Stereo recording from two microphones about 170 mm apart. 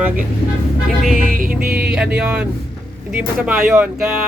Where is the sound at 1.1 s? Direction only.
50° right (ahead or behind).